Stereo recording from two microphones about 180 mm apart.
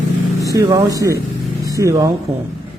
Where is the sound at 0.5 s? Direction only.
20° right (ahead or behind).